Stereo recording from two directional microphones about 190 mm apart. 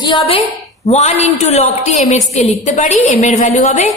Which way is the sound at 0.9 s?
35° left (ahead or behind).